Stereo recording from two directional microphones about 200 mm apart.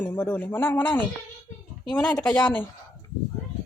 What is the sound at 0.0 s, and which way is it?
A woman's voice, 10° left (ahead or behind).